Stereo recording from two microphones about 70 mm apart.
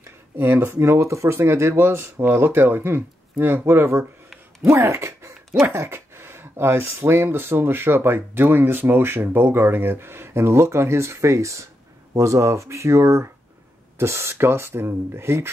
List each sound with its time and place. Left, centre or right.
0.4 s speech: right